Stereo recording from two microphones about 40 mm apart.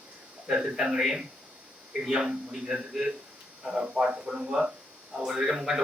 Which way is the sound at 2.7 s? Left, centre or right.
Centre.